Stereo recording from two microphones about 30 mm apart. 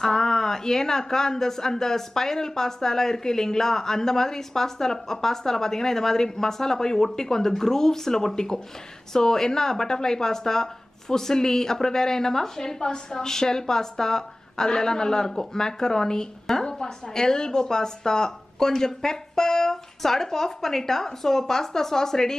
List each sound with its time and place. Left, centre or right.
0.0 s a woman's voice: centre